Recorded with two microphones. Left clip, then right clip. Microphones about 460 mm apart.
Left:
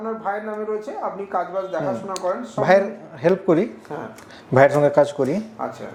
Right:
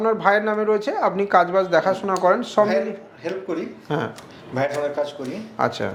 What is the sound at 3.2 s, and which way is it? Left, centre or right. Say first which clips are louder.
Speech: left 9 dB; left.